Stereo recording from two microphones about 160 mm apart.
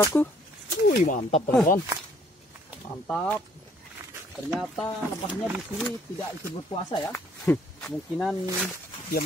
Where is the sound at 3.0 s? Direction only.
5° left (ahead or behind).